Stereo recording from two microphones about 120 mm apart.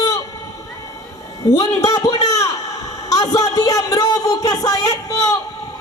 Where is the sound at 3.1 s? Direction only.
30° left (ahead or behind).